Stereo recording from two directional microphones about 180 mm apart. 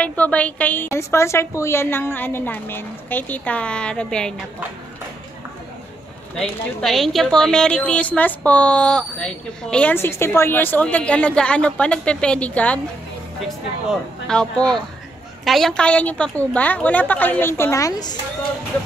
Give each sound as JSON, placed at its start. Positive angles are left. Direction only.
{"t": 0.0, "sound": "a woman's voice", "side_deg": 5}
{"t": 6.8, "sound": "a woman's voice", "side_deg": 0}
{"t": 14.2, "sound": "a woman's voice", "side_deg": 5}